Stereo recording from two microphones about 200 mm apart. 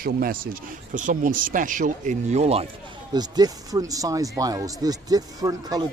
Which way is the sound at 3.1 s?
20° right (ahead or behind).